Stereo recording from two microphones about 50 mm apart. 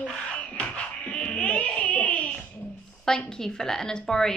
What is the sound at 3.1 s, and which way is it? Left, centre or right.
A woman's voice, centre.